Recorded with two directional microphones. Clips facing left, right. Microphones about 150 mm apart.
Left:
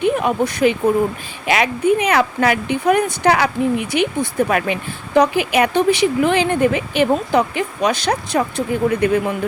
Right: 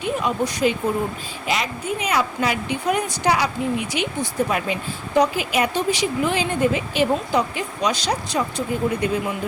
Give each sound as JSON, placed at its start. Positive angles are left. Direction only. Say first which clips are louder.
{"t": 0.0, "sound": "speech", "louder": "left 6 dB", "side_deg": 55}